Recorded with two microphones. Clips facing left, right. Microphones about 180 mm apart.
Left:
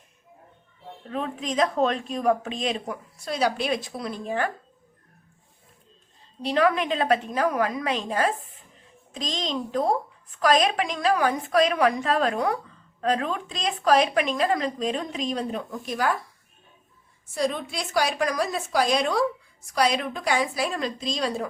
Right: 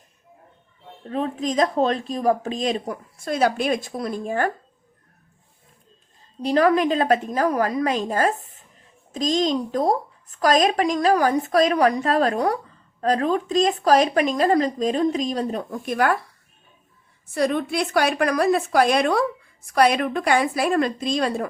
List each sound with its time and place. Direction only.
1.0 s speech: 35° right (ahead or behind)
6.4 s speech: 40° right (ahead or behind)
15.7 s a woman's voice: 60° right (ahead or behind)
17.3 s a woman's voice: 60° right (ahead or behind)